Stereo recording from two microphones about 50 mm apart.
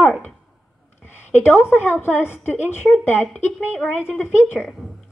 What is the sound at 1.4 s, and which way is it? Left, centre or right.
A woman's voice, left.